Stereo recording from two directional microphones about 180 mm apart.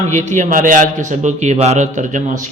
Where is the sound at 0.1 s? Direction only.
45° right (ahead or behind).